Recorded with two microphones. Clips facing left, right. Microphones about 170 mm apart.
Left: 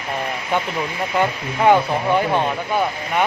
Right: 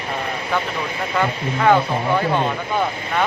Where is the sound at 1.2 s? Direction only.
20° left (ahead or behind).